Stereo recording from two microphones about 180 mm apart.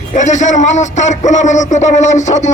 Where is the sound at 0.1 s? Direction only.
40° left (ahead or behind).